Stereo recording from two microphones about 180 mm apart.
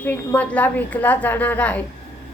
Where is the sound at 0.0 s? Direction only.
10° left (ahead or behind).